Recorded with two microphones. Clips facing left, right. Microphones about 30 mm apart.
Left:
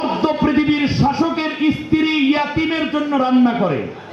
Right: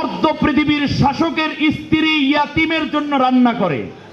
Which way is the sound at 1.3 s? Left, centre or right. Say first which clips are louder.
Right 1 dB; right.